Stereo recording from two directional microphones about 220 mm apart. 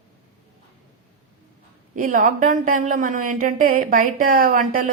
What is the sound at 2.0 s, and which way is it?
Speech, 40° right (ahead or behind).